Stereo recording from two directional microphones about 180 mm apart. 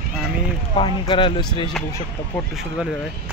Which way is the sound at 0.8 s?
30° left (ahead or behind).